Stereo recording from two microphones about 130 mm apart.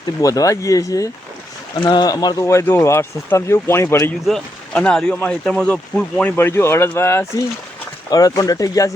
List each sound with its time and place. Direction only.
0.2 s speech: 25° left (ahead or behind)
4.3 s speech: 5° left (ahead or behind); by 8.9 s 25° left (ahead or behind)